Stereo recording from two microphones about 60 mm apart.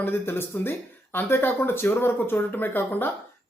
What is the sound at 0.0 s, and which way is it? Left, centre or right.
Speech, left.